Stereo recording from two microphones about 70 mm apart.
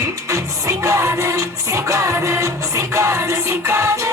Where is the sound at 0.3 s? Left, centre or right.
Right.